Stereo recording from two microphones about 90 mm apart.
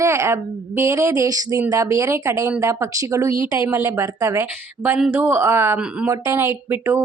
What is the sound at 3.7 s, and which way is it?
Speech, 25° right (ahead or behind).